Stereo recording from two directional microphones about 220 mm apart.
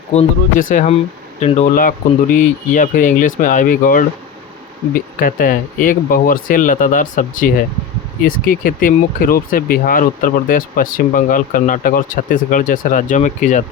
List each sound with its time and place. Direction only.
0.1 s speech: 30° left (ahead or behind)